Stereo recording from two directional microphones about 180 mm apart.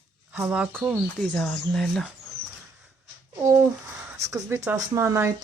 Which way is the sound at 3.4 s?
15° right (ahead or behind).